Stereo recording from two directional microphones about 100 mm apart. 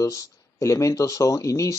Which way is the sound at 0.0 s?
35° left (ahead or behind).